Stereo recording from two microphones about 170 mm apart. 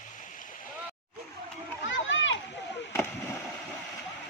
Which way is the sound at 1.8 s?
90° left.